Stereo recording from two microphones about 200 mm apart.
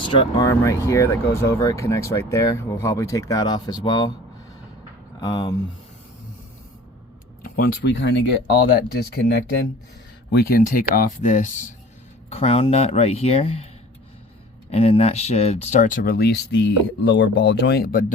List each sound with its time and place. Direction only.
0.0 s speech: 25° left (ahead or behind)
0.4 s speech: 15° left (ahead or behind)
5.2 s speech: 20° left (ahead or behind)
7.4 s speech: 45° left (ahead or behind); by 8.1 s 60° left (ahead or behind)
8.7 s speech: 50° left (ahead or behind); by 13.7 s 30° left (ahead or behind)
14.7 s speech: 30° left (ahead or behind); by 18.0 s 50° left (ahead or behind)